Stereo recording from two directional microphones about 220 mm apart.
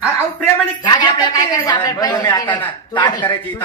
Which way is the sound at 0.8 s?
20° left (ahead or behind).